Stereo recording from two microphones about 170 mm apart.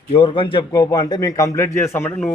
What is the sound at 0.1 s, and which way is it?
Speech, 30° left (ahead or behind).